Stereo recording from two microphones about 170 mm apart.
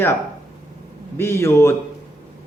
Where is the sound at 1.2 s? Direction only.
15° left (ahead or behind).